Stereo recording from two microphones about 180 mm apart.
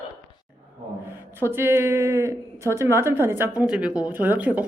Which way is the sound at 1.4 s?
15° right (ahead or behind).